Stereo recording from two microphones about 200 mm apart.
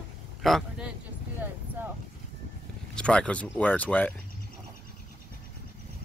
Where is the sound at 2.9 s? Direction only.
5° left (ahead or behind).